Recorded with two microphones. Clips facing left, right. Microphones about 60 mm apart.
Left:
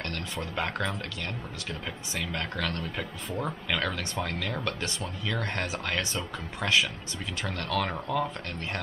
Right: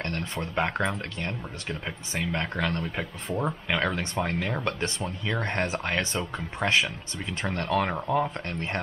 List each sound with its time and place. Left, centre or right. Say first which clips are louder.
0.0 s speech: right 3 dB; right